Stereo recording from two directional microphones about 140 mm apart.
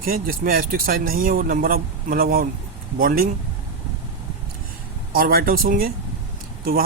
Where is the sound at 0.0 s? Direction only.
90° right.